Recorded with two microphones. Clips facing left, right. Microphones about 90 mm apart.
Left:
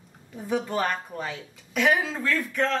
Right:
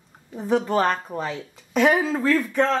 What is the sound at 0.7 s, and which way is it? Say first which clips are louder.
Speech: right 6 dB; 25° right (ahead or behind).